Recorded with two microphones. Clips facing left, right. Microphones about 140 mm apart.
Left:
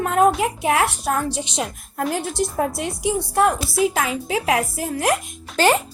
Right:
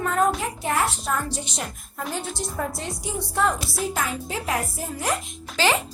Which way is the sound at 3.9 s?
90° left.